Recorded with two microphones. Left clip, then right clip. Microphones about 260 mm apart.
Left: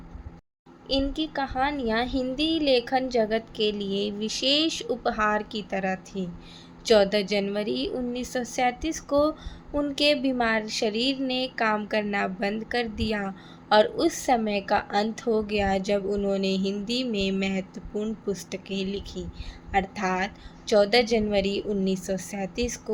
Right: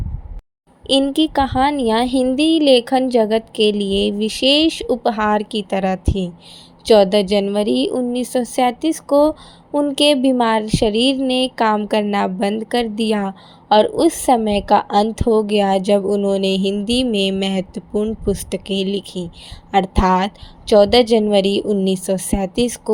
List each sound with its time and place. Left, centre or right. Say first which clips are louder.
0.9 s speech: right 11 dB; right